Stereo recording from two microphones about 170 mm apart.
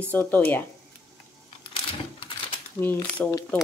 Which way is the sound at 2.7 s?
10° left (ahead or behind).